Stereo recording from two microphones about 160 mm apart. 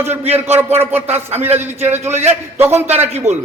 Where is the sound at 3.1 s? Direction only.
45° right (ahead or behind).